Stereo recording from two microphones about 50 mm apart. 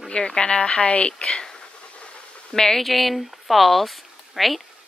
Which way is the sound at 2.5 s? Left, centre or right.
Centre.